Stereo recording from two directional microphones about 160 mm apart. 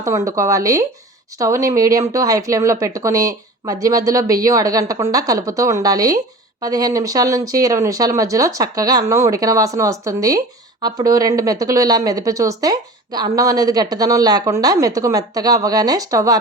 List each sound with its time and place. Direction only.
0.0 s speech: 20° right (ahead or behind)